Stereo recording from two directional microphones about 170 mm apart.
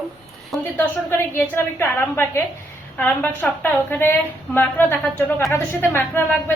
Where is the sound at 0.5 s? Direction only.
Centre (ahead or behind).